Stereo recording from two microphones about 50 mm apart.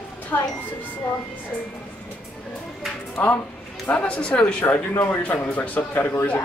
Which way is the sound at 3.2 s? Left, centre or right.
Left.